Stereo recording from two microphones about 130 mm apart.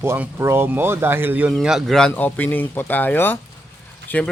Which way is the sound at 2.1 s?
15° left (ahead or behind).